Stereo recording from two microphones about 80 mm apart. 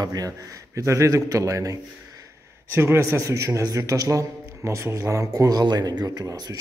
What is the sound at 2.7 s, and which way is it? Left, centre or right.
A man's voice, right.